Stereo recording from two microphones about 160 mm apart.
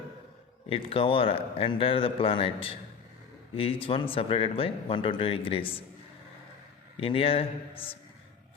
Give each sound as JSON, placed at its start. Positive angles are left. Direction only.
{"t": 0.7, "sound": "speech", "side_deg": 35}
{"t": 6.9, "sound": "speech", "side_deg": 35}